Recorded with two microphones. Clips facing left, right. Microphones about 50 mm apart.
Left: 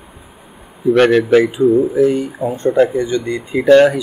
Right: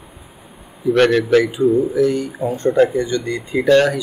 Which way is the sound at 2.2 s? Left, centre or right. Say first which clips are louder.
Left 1 dB; centre.